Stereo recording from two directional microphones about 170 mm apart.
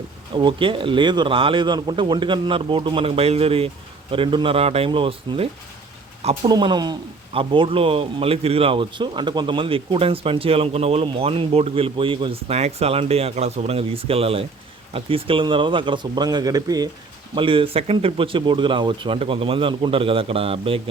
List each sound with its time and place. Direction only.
0.3 s a man's voice: 30° right (ahead or behind)